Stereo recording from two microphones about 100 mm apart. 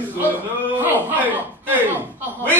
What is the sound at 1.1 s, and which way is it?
Chuckle, 15° right (ahead or behind).